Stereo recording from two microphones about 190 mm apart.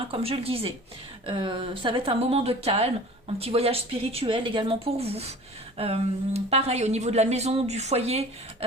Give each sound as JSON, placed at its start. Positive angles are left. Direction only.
{"t": 0.1, "sound": "speech", "side_deg": -30}